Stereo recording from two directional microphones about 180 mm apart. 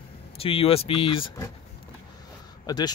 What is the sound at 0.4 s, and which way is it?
Speech, 30° left (ahead or behind).